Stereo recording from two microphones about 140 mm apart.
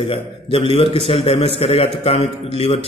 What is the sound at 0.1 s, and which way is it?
A man's voice, 40° left (ahead or behind).